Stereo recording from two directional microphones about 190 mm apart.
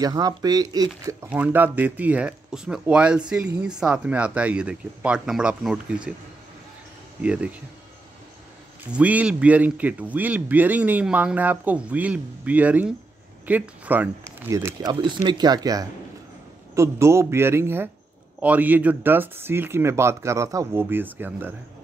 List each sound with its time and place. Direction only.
0.0 s speech: 20° right (ahead or behind)
1.3 s speech: 10° right (ahead or behind)
7.2 s speech: 5° right (ahead or behind)
8.9 s speech: 5° right (ahead or behind)